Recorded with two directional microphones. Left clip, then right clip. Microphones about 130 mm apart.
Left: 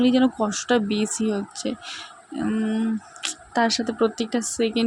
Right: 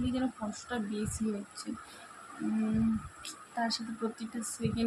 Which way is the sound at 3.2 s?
70° left (ahead or behind).